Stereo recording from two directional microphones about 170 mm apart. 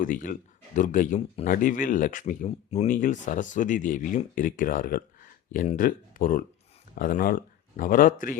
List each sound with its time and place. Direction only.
0.0 s speech: 50° left (ahead or behind)
2.5 s speech: 40° left (ahead or behind)
2.9 s speech: 50° left (ahead or behind)